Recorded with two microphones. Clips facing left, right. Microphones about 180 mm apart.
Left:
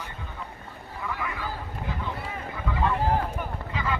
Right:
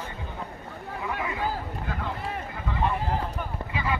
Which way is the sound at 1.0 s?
20° right (ahead or behind).